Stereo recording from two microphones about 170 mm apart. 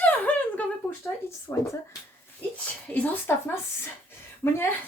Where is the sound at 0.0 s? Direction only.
10° left (ahead or behind).